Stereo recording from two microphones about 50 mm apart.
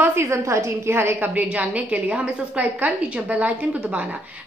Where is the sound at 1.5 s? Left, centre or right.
Right.